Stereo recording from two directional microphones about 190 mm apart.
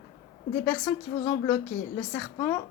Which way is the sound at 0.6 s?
10° left (ahead or behind).